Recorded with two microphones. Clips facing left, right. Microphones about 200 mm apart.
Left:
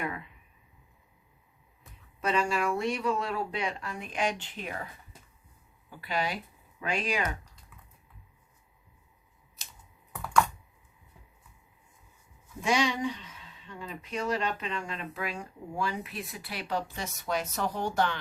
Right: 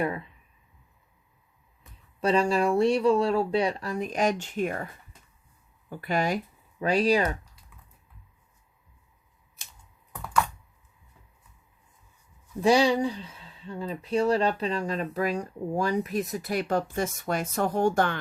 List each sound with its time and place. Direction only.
0.0 s speech: 35° right (ahead or behind)
2.2 s speech: 35° right (ahead or behind); by 4.8 s 50° right (ahead or behind)
5.9 s speech: 50° right (ahead or behind)
12.6 s speech: 35° right (ahead or behind); by 18.2 s 50° right (ahead or behind)